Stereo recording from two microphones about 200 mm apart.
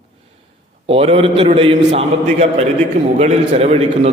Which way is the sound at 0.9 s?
25° right (ahead or behind).